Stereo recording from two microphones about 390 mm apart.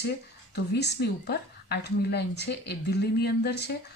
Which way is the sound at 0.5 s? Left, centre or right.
Left.